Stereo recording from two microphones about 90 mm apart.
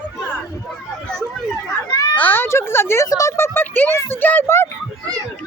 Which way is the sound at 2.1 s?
20° left (ahead or behind).